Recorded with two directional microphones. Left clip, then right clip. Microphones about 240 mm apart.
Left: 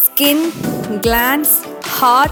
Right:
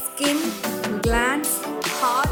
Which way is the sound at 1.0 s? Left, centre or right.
Left.